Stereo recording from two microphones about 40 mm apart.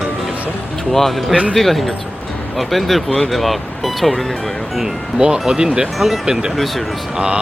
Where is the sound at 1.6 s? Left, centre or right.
Centre.